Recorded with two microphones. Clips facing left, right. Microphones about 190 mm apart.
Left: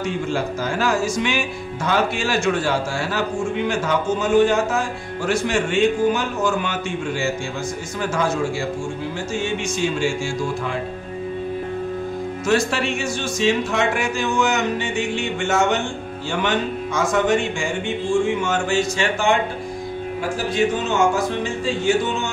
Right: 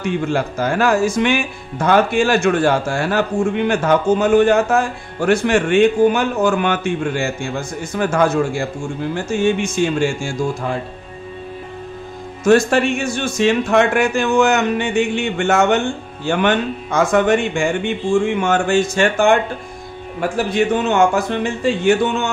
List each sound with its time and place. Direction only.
0.0 s speech: 60° right (ahead or behind)
9.1 s music: 55° right (ahead or behind)
12.4 s speech: 50° right (ahead or behind)
18.4 s music: 55° right (ahead or behind)
20.2 s speech: 60° right (ahead or behind)